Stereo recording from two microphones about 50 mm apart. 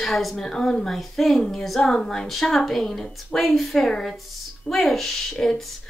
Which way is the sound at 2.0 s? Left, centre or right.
Centre.